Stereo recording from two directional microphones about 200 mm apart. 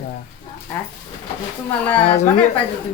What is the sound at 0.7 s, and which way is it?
Speech, 10° left (ahead or behind).